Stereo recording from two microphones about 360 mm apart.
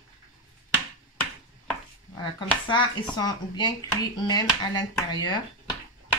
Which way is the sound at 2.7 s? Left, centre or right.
Centre.